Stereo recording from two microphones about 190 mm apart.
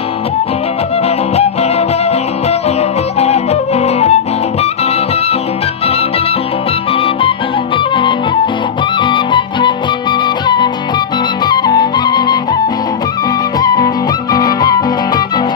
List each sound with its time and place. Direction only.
1.0 s music: 35° left (ahead or behind)
3.2 s music: 35° left (ahead or behind)
6.9 s music: 30° left (ahead or behind)
13.6 s music: 20° left (ahead or behind)